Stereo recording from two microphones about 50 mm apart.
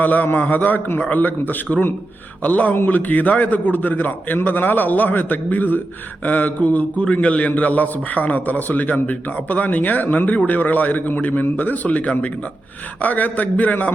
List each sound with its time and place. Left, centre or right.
0.0 s a man's voice: left